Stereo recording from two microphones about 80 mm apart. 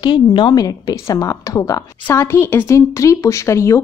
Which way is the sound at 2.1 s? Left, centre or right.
Left.